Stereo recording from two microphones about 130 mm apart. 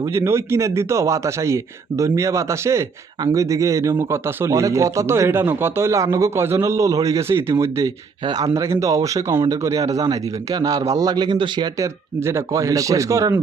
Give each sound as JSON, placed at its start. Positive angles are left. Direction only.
{"t": 0.1, "sound": "speech", "side_deg": -20}
{"t": 11.8, "sound": "speech", "side_deg": -20}